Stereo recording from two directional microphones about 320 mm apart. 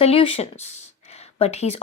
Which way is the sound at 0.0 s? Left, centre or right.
Centre.